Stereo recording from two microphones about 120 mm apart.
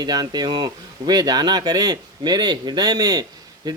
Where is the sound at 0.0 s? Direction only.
35° right (ahead or behind).